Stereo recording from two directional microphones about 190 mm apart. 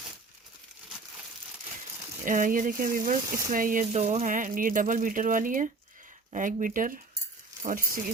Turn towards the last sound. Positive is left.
turn(degrees=-45)  # may be behind; listen again after turning